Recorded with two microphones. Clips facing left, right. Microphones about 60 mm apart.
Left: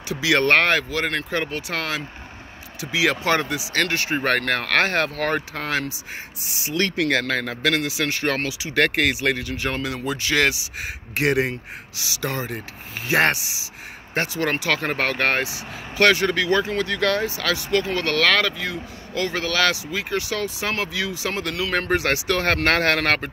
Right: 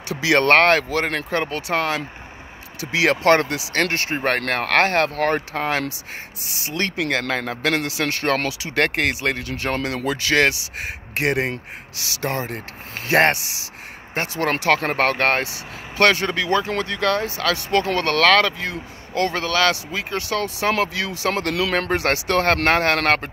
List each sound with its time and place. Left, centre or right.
0.1 s speech: right
2.8 s speech: right
3.7 s speech: right
7.0 s a man's voice: right
7.8 s speech: right
8.7 s speech: right
9.5 s speech: right
9.8 s speech: right
10.3 s speech: right
11.1 s speech: right
13.2 s speech: right
21.3 s speech: right
21.9 s speech: right
22.7 s a man's voice: right